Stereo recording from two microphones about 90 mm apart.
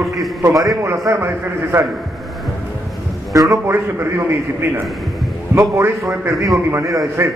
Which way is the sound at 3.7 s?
30° right (ahead or behind).